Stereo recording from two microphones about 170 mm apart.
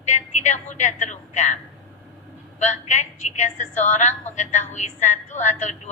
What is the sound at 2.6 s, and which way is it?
A woman's voice, 45° left (ahead or behind).